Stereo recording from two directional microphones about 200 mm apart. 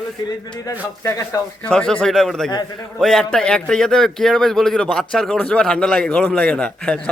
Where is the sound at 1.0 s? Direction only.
15° left (ahead or behind).